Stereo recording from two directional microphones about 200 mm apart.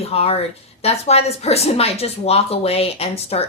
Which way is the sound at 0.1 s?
30° left (ahead or behind).